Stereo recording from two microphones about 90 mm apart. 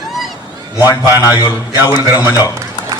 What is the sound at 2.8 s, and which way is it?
Run, 50° left (ahead or behind).